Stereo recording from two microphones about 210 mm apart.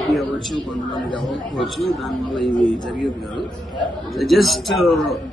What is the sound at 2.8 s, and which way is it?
Speech, 20° left (ahead or behind).